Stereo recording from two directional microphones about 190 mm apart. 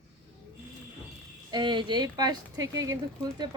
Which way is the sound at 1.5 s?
25° right (ahead or behind).